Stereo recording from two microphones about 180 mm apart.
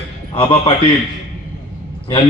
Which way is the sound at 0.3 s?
30° left (ahead or behind).